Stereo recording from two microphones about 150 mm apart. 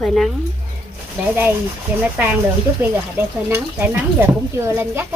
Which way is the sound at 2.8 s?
15° right (ahead or behind).